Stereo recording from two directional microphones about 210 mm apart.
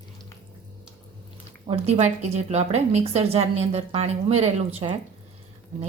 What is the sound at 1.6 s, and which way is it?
A woman's voice, 30° right (ahead or behind).